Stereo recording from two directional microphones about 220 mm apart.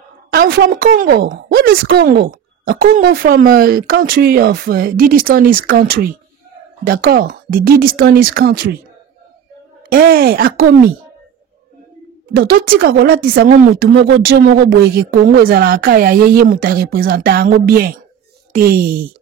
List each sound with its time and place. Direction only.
0.3 s a woman's voice: 45° right (ahead or behind)
9.8 s a woman's voice: 45° right (ahead or behind)
12.4 s a woman's voice: 45° right (ahead or behind)